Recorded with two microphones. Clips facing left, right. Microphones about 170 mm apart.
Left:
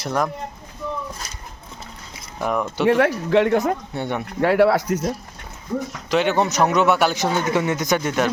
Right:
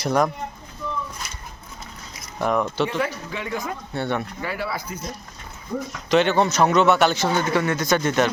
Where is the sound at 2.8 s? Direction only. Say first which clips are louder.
Left 8 dB; 90° left.